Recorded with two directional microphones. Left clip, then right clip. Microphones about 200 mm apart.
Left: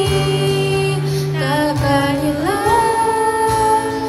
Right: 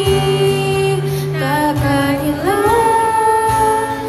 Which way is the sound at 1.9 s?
Centre (ahead or behind).